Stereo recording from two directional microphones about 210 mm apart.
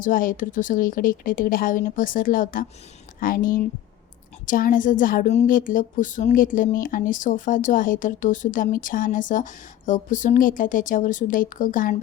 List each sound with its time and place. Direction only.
0.0 s a woman's voice: 40° left (ahead or behind)